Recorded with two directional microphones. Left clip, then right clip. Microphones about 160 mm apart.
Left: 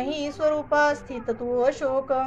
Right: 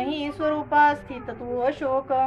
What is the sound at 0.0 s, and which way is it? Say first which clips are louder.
Child singing: left 1 dB; 35° left (ahead or behind).